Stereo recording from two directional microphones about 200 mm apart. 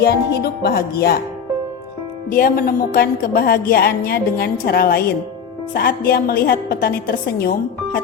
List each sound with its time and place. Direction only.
0.0 s a woman's voice: 55° left (ahead or behind)
2.3 s a woman's voice: 45° left (ahead or behind)